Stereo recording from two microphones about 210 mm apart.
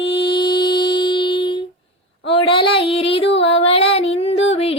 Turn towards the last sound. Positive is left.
turn(degrees=30)  # may be behind; listen again after turning